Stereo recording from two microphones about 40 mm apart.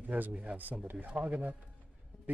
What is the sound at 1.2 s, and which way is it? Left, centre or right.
Speech, centre.